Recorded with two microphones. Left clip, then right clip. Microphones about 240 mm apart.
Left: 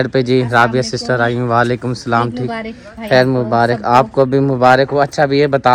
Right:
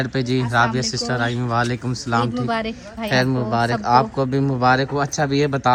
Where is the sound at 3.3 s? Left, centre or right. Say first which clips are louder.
Left 7 dB; centre.